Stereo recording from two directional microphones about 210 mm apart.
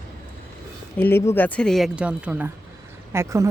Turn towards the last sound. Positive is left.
turn(degrees=-15)  # may be behind; listen again after turning